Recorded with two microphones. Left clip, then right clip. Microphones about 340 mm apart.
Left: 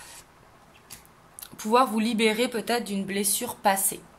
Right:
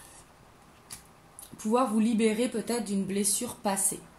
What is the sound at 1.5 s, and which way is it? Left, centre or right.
Speech, left.